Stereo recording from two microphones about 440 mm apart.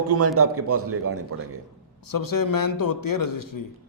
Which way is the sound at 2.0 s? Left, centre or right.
Left.